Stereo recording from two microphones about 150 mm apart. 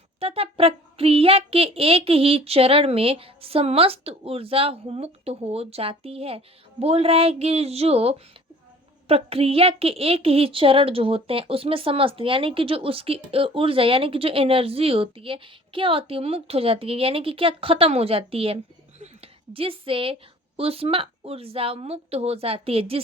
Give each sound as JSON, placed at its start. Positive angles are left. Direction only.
{"t": 0.2, "sound": "a woman's voice", "side_deg": -40}